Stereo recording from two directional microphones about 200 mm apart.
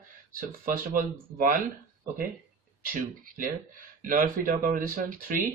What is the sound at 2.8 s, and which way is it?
Speech, 45° right (ahead or behind).